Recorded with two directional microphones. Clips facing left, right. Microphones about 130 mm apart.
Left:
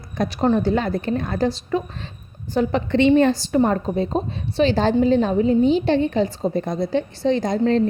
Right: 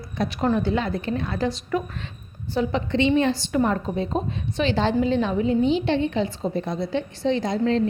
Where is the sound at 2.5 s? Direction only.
50° left (ahead or behind).